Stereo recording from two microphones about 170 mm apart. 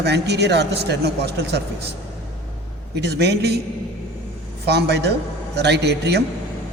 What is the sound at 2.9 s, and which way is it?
Speech, 75° right (ahead or behind).